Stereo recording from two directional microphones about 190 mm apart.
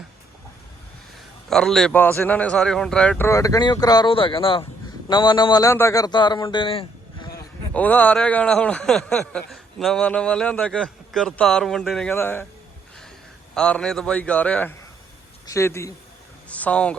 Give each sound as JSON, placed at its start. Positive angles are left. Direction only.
{"t": 1.5, "sound": "a man's voice", "side_deg": 0}
{"t": 7.7, "sound": "a man's voice", "side_deg": 10}
{"t": 13.5, "sound": "a man's voice", "side_deg": 5}